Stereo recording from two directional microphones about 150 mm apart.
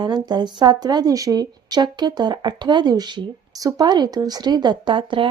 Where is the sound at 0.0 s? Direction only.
30° right (ahead or behind).